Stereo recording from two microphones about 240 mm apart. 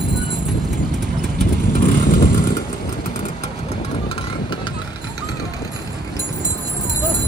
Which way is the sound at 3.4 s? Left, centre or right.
Left.